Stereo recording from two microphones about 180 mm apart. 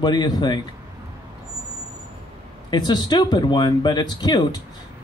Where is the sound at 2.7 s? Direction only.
25° left (ahead or behind).